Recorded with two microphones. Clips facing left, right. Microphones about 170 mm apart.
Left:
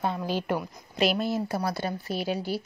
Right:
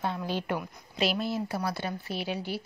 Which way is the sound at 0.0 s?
40° left (ahead or behind).